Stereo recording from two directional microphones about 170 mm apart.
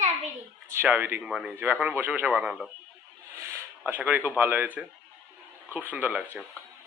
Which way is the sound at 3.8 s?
10° right (ahead or behind).